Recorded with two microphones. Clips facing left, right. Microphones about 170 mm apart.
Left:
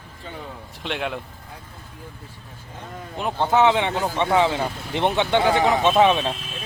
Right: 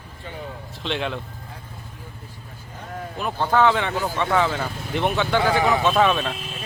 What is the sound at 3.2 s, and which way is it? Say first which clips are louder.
Speech: left 1 dB; 20° left (ahead or behind).